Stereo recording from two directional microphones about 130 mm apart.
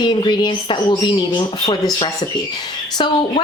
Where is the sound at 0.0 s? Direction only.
35° left (ahead or behind).